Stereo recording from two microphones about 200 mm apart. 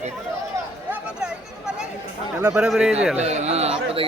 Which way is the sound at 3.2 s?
35° right (ahead or behind).